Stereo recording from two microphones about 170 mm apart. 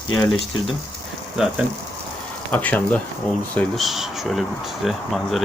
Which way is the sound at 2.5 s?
10° left (ahead or behind).